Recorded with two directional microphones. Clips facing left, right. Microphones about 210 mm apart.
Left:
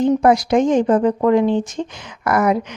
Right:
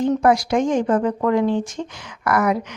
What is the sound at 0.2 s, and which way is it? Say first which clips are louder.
Speech: left 3 dB; 20° left (ahead or behind).